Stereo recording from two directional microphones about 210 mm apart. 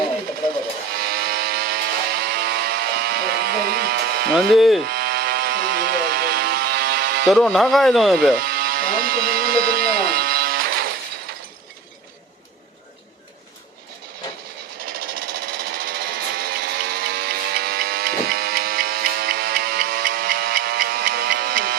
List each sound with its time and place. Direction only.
1.0 s a sound: 45° right (ahead or behind)
4.5 s speech: centre (ahead or behind)
4.9 s vehicle: 50° right (ahead or behind)
7.3 s speech: 5° left (ahead or behind)
8.4 s a sound: 45° right (ahead or behind)
14.8 s sewing machine: 45° right (ahead or behind)